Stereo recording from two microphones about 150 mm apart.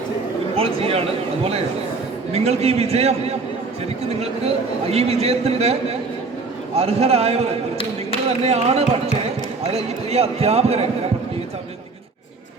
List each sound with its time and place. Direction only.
0.5 s speech: 40° right (ahead or behind)
2.3 s a man's voice: 45° right (ahead or behind)